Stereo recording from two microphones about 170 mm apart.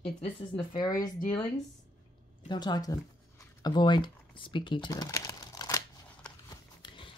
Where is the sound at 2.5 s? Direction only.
25° left (ahead or behind).